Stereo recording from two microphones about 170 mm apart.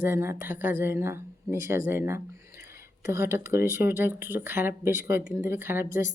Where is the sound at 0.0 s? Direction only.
15° right (ahead or behind).